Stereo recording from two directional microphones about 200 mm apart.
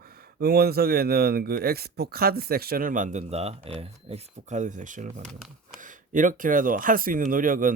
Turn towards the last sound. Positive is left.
turn(degrees=-45)  # may be behind; listen again after turning